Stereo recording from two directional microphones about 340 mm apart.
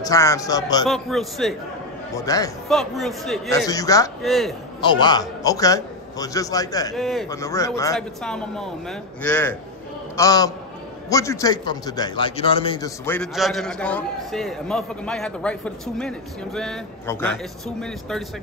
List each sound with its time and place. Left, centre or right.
0.0 s a man's voice: centre
0.8 s a man's voice: centre
4.9 s a man's voice: centre
7.0 s a man's voice: centre